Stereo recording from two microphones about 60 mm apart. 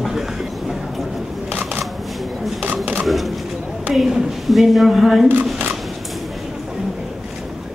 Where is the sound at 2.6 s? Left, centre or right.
Right.